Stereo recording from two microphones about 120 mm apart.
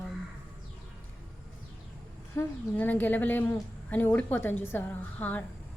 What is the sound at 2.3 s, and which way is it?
A woman's voice, 15° left (ahead or behind).